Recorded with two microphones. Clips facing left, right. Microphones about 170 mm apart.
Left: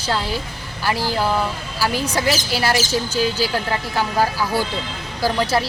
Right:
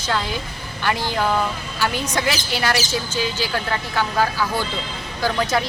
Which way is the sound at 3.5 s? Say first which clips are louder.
Left 2 dB; 10° left (ahead or behind).